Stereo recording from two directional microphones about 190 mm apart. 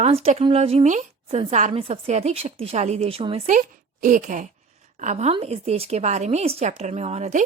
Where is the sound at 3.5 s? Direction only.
45° right (ahead or behind).